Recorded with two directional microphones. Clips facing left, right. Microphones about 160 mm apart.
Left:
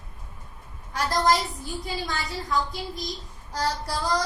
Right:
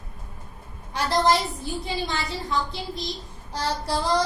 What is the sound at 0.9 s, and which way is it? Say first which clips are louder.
A woman's voice: right 2 dB; 25° right (ahead or behind).